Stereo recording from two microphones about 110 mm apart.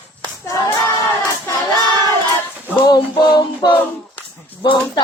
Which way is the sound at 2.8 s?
40° left (ahead or behind).